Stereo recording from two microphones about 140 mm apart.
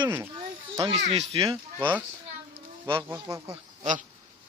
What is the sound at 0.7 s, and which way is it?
Speech, 40° right (ahead or behind).